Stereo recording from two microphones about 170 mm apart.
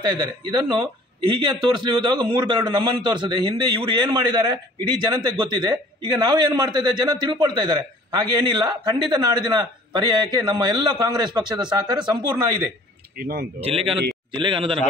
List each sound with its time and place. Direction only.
0.0 s a man's voice: 25° right (ahead or behind)
13.2 s speech: 60° right (ahead or behind)
13.6 s a man's voice: 35° right (ahead or behind)